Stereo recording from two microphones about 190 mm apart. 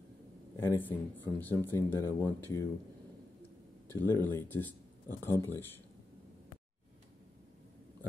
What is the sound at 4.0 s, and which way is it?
Speech, 10° left (ahead or behind).